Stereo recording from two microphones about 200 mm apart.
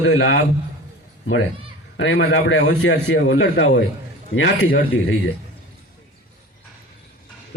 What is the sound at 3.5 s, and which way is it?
A man's voice, 55° left (ahead or behind).